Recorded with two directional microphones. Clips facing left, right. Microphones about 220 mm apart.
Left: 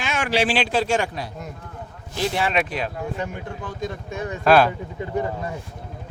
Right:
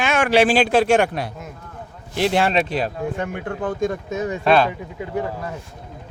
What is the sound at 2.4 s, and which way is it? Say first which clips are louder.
Speech: right 3 dB; 35° right (ahead or behind).